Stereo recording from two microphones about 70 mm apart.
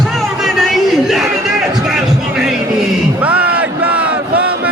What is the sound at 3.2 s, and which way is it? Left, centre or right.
Crowd, centre.